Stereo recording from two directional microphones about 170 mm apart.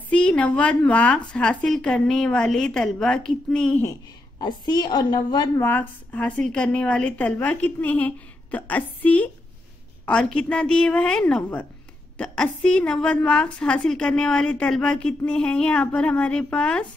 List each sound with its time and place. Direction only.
0.1 s a woman's voice: 5° left (ahead or behind)
3.8 s a woman's voice: 20° left (ahead or behind)
5.6 s a woman's voice: 10° left (ahead or behind)